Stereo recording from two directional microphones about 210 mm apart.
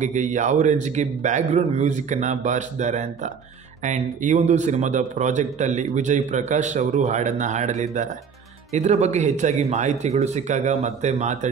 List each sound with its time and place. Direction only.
0.0 s speech: 35° right (ahead or behind)